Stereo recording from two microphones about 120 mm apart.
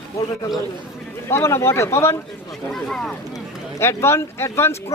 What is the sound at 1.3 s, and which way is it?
Speech, 25° left (ahead or behind).